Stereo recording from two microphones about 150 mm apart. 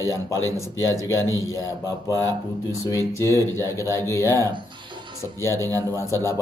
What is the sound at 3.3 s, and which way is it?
Speech, 20° left (ahead or behind).